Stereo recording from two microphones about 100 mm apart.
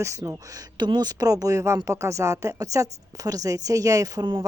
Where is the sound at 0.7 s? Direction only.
45° right (ahead or behind).